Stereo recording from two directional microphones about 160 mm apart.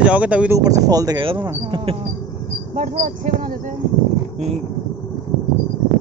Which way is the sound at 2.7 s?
50° right (ahead or behind).